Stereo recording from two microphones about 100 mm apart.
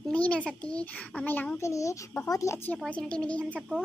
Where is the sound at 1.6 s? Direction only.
30° left (ahead or behind).